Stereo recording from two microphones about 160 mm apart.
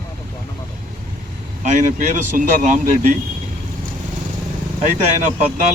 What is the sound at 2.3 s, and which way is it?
Speech, 55° right (ahead or behind).